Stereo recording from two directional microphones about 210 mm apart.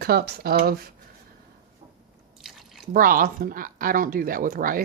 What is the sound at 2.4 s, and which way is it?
Drip, centre (ahead or behind).